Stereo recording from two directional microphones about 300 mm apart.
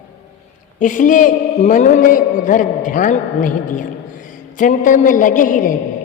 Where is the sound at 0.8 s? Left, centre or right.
Left.